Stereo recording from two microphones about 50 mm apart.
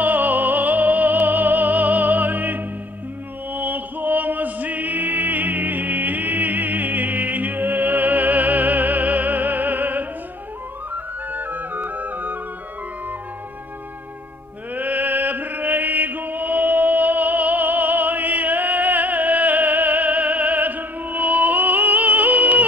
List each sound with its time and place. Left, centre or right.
0.0 s music: right
14.7 s chant: right